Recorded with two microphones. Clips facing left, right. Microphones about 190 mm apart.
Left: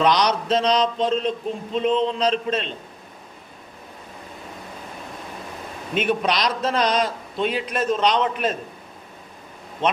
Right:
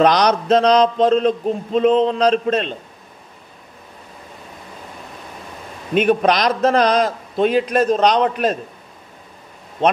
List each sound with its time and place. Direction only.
0.0 s a man's voice: 45° right (ahead or behind)
5.9 s a man's voice: 45° right (ahead or behind)